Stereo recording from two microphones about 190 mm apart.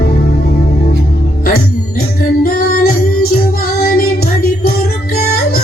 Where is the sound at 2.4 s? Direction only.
50° left (ahead or behind).